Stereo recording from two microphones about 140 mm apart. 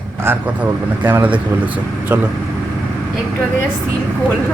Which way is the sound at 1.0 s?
15° right (ahead or behind).